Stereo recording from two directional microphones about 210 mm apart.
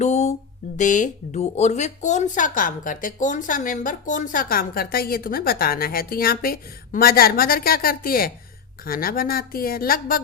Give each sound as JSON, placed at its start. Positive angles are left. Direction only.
{"t": 0.0, "sound": "mantra", "side_deg": 35}
{"t": 0.8, "sound": "a woman's voice", "side_deg": 35}